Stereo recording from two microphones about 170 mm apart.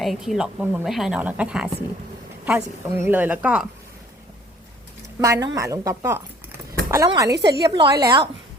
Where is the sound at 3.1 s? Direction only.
10° right (ahead or behind).